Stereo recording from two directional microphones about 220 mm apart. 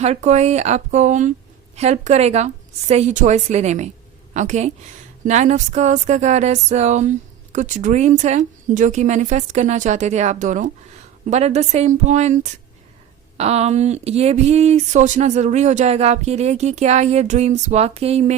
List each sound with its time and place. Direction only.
0.0 s speech: 30° right (ahead or behind)